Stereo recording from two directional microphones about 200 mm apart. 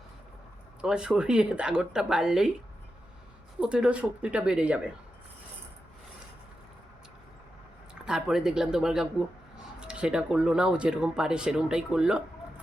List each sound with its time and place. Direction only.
0.8 s speech: 5° right (ahead or behind)
3.6 s speech: 5° right (ahead or behind)
8.0 s speech: 5° right (ahead or behind)